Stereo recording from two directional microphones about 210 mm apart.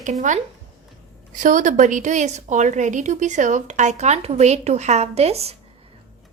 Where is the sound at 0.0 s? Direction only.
35° right (ahead or behind).